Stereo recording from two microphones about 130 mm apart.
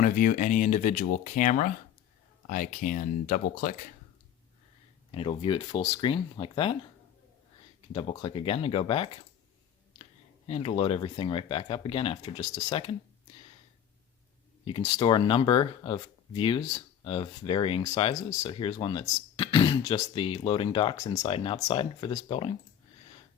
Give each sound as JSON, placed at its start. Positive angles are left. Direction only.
{"t": 0.0, "sound": "speech", "side_deg": 90}
{"t": 5.1, "sound": "speech", "side_deg": 45}
{"t": 7.9, "sound": "speech", "side_deg": 40}
{"t": 10.4, "sound": "speech", "side_deg": 45}
{"t": 14.6, "sound": "speech", "side_deg": 45}